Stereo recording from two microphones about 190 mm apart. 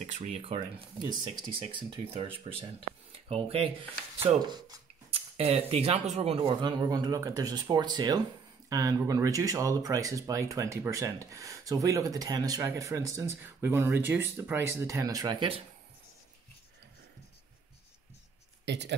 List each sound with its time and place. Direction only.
0.0 s speech: 35° right (ahead or behind)
18.7 s speech: 65° right (ahead or behind)